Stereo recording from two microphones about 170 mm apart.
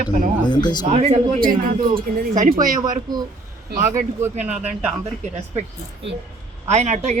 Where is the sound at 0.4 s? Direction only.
25° left (ahead or behind).